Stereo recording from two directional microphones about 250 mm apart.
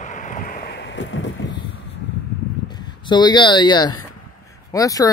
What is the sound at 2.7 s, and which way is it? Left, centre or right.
Speech, centre.